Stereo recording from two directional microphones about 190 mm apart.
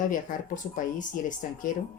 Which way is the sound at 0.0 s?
45° left (ahead or behind).